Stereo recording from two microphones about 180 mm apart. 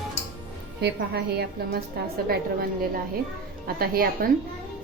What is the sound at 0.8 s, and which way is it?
Speech, 65° right (ahead or behind).